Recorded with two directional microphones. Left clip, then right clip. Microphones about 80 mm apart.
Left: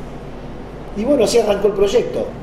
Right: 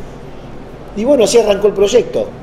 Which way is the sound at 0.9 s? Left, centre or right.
Right.